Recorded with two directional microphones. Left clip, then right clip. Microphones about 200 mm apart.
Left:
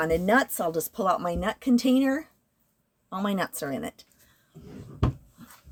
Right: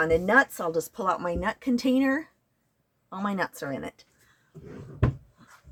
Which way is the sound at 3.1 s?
20° left (ahead or behind).